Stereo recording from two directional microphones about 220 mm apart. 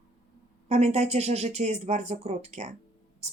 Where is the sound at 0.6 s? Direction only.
30° right (ahead or behind).